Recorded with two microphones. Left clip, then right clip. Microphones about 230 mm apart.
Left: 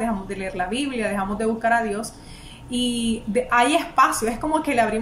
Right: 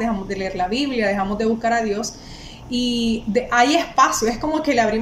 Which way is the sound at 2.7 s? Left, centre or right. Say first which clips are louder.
Right 3 dB; centre.